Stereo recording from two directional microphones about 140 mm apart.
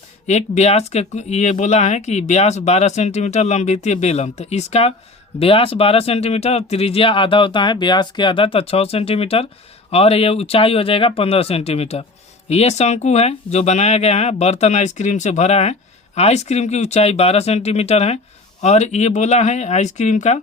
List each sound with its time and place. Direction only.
0.3 s speech: 55° left (ahead or behind)